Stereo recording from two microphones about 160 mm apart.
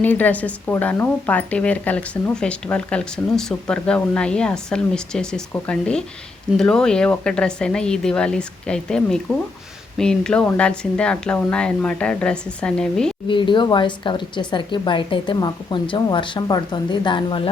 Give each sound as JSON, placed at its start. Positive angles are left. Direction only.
{"t": 0.0, "sound": "a woman's voice", "side_deg": 10}
{"t": 13.2, "sound": "speech", "side_deg": 30}